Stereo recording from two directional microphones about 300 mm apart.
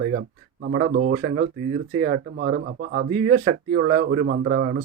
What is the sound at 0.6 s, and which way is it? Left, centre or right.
Speech, right.